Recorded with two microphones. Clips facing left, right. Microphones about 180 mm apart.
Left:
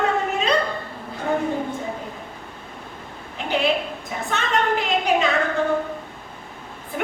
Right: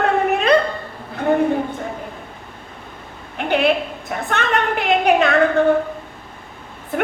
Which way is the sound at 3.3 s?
60° right (ahead or behind).